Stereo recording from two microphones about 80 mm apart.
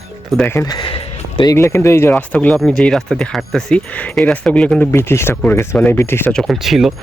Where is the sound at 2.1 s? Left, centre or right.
Centre.